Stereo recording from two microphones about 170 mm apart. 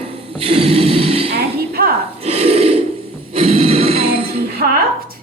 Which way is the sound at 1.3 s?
65° right (ahead or behind).